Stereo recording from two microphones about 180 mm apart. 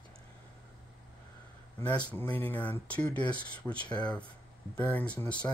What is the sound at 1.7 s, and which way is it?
Speech, 10° left (ahead or behind).